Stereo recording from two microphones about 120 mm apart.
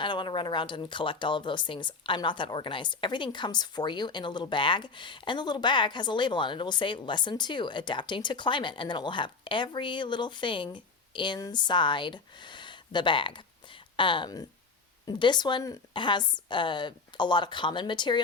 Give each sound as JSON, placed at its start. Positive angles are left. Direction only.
{"t": 0.0, "sound": "speech", "side_deg": 40}